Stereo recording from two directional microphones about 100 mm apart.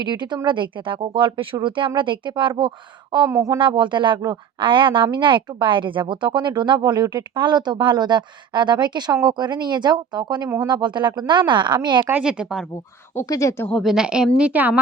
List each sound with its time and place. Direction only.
0.0 s speech: 45° right (ahead or behind)
3.2 s speech: 30° right (ahead or behind)
3.6 s speech: 50° right (ahead or behind)
12.2 s a woman's voice: 5° right (ahead or behind)
13.2 s speech: 35° left (ahead or behind)
13.7 s a woman's voice: centre (ahead or behind); by 14.8 s 15° right (ahead or behind)